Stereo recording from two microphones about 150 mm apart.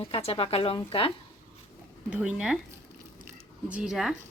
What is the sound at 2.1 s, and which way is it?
Speech, 10° right (ahead or behind).